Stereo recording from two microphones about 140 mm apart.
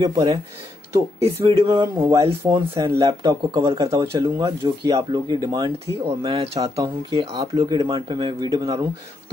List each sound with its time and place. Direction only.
0.0 s speech: 30° right (ahead or behind)
1.2 s speech: 45° right (ahead or behind)
1.7 s speech: 25° right (ahead or behind)
2.2 s speech: 35° right (ahead or behind)
4.5 s speech: 35° right (ahead or behind)
6.2 s speech: 45° right (ahead or behind)
6.6 s speech: 35° right (ahead or behind)